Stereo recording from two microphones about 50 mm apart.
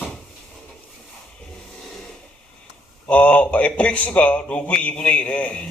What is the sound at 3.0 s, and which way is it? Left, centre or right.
A man's voice, left.